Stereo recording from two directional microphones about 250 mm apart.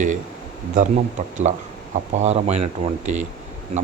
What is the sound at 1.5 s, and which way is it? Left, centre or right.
Speech, right.